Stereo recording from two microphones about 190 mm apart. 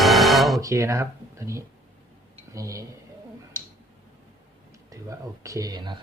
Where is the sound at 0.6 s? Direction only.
15° right (ahead or behind).